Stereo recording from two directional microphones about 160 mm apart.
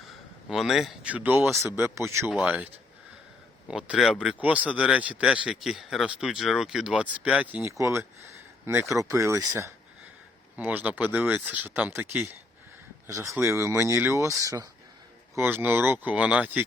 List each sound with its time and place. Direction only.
0.4 s speech: centre (ahead or behind)
3.7 s speech: 5° right (ahead or behind)
7.7 s speech: 20° right (ahead or behind)